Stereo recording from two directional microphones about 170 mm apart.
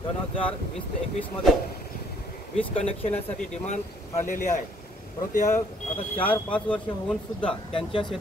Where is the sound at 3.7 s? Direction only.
45° left (ahead or behind).